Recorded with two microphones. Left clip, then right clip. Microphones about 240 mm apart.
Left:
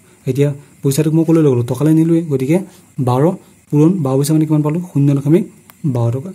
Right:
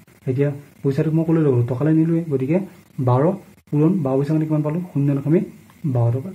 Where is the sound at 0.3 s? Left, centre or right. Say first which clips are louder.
Left 5 dB; left.